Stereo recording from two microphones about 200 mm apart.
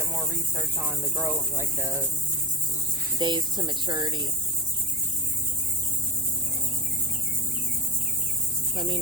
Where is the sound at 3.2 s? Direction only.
20° right (ahead or behind).